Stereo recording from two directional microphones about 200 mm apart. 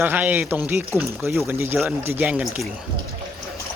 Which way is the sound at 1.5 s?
10° right (ahead or behind).